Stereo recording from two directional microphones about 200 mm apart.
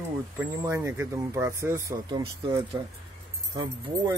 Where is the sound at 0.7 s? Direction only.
15° right (ahead or behind).